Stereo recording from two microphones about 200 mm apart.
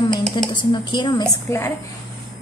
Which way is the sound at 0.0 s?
20° left (ahead or behind).